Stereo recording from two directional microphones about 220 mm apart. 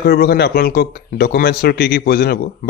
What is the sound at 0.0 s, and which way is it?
Speech, 45° left (ahead or behind).